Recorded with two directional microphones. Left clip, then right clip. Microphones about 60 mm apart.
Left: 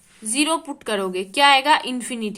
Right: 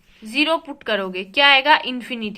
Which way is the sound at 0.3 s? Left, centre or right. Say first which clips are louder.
Right 2 dB; left.